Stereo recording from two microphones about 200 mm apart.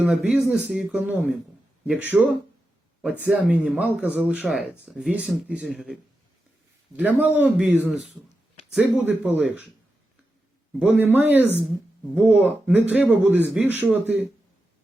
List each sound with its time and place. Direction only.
0.0 s speech: 5° right (ahead or behind)
10.8 s speech: 10° right (ahead or behind)